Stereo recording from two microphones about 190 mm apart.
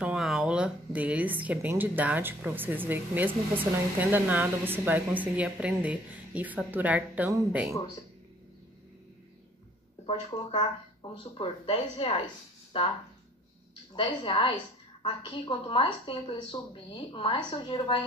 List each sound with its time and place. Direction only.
0.0 s speech: centre (ahead or behind)
10.3 s speech: 20° left (ahead or behind)
13.9 s speech: 25° left (ahead or behind)